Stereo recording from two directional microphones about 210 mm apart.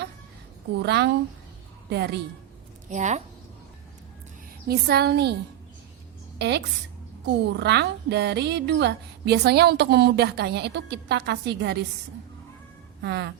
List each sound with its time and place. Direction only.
0.8 s a woman's voice: 55° right (ahead or behind)
2.9 s a woman's voice: 35° right (ahead or behind)
4.7 s a woman's voice: 50° right (ahead or behind)
6.4 s a woman's voice: 50° right (ahead or behind)
13.0 s a woman's voice: 55° right (ahead or behind)